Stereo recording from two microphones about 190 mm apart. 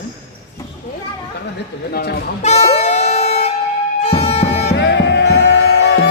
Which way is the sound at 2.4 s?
35° left (ahead or behind).